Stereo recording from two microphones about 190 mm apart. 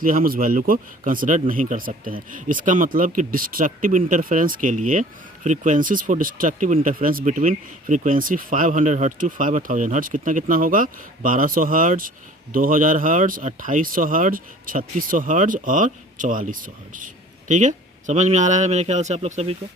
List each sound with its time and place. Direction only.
0.0 s a man's voice: 45° right (ahead or behind)